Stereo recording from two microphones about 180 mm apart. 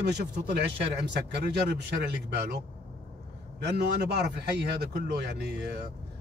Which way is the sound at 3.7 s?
65° right (ahead or behind).